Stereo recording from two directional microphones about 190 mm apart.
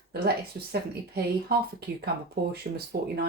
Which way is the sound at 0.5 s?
60° right (ahead or behind).